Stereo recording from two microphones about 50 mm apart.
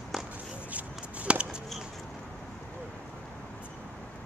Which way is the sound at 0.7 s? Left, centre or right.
Right.